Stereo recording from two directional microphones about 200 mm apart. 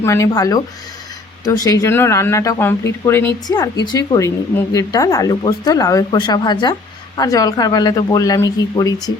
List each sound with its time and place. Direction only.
0.0 s speech: 15° left (ahead or behind)